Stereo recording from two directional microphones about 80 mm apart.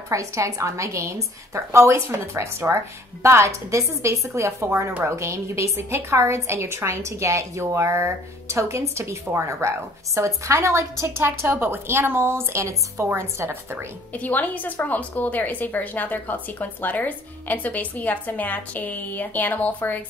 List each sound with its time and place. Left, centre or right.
0.1 s a woman's voice: right
14.1 s a woman's voice: centre